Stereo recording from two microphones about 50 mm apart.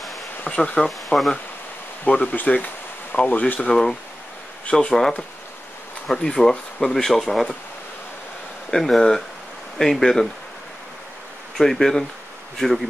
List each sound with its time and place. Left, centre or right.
0.5 s speech: left
0.8 s speech: centre
2.0 s speech: left
4.6 s speech: centre
6.8 s speech: centre
8.6 s speech: centre
11.5 s speech: centre